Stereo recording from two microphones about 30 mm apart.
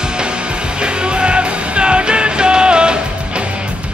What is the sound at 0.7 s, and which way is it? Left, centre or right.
Music, right.